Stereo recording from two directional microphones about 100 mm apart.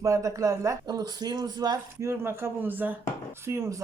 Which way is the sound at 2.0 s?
25° right (ahead or behind).